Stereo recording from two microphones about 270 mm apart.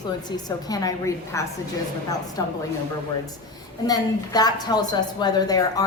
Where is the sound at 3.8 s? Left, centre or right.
Centre.